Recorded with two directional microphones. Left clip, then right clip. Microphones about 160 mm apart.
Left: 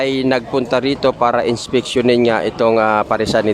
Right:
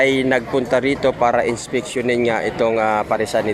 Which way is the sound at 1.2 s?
25° left (ahead or behind).